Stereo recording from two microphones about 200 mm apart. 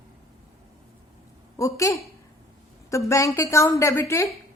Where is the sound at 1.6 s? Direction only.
15° left (ahead or behind).